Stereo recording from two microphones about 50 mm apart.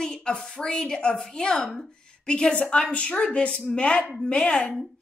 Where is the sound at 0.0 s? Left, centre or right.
Centre.